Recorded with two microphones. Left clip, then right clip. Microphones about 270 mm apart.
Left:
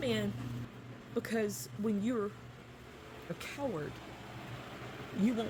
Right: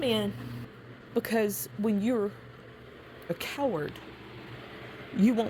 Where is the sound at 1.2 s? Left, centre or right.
Right.